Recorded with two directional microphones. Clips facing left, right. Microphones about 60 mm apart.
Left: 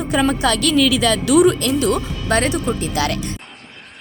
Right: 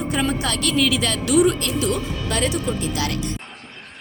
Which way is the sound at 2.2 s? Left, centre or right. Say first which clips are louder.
Left 6 dB; left.